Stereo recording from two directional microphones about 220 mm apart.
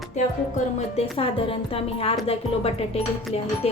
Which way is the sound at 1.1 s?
25° left (ahead or behind).